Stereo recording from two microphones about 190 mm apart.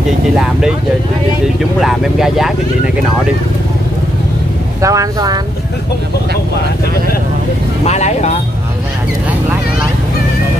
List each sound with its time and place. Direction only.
1.8 s speech: centre (ahead or behind)
4.8 s speech: 20° right (ahead or behind)
7.8 s speech: 35° left (ahead or behind)